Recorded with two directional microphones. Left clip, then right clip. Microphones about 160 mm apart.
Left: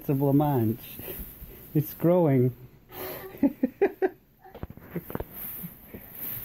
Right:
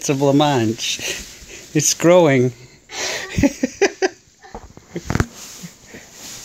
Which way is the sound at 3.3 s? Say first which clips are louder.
Right 5 dB; 20° right (ahead or behind).